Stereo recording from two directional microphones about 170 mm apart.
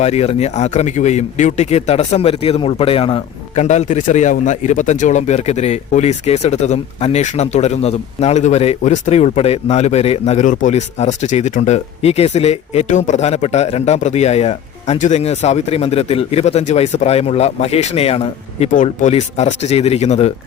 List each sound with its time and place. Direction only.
0.0 s speech: 40° left (ahead or behind)
3.5 s speech: 45° left (ahead or behind)